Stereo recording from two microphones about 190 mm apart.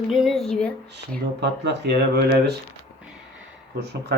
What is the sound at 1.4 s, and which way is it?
Speech, 65° right (ahead or behind).